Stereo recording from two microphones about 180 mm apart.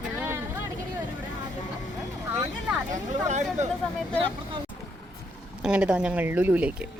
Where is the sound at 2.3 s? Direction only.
10° right (ahead or behind).